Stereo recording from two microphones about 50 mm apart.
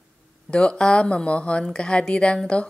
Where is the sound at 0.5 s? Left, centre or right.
Centre.